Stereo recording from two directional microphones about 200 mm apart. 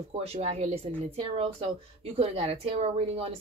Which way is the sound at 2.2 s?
30° right (ahead or behind).